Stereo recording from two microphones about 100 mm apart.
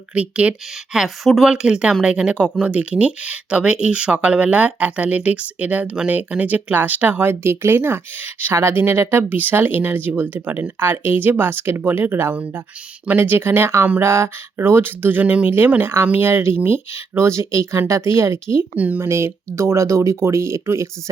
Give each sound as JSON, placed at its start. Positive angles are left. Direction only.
{"t": 0.1, "sound": "speech", "side_deg": -10}
{"t": 0.9, "sound": "speech", "side_deg": 0}
{"t": 18.8, "sound": "speech", "side_deg": -15}
{"t": 19.0, "sound": "speech", "side_deg": -25}